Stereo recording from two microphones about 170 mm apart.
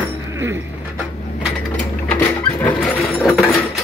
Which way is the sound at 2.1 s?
10° left (ahead or behind).